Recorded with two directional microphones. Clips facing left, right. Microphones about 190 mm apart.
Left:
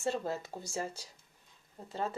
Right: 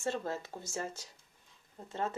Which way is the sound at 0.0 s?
15° left (ahead or behind).